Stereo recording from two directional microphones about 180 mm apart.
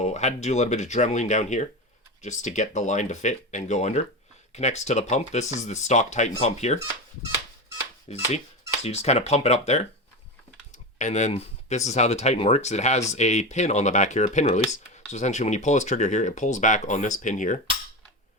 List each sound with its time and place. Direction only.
0.0 s speech: 40° left (ahead or behind)
8.1 s speech: 35° left (ahead or behind)
10.9 s speech: 40° left (ahead or behind)